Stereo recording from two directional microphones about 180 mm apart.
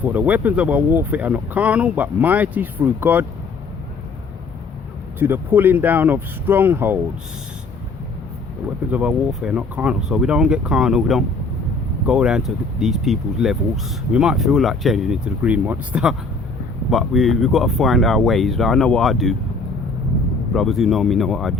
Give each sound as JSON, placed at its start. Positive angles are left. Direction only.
{"t": 0.0, "sound": "speech", "side_deg": -10}
{"t": 5.2, "sound": "speech", "side_deg": -10}
{"t": 8.6, "sound": "speech", "side_deg": -5}
{"t": 20.5, "sound": "speech", "side_deg": 0}